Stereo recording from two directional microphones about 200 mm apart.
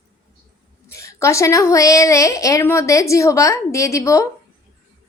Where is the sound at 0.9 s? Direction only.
15° left (ahead or behind).